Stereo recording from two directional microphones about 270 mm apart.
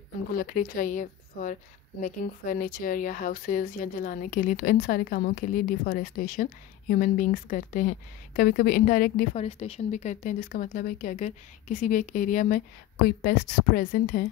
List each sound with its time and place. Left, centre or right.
0.3 s a woman's voice: left